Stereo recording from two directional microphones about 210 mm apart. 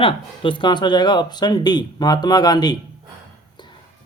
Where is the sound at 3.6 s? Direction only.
20° left (ahead or behind).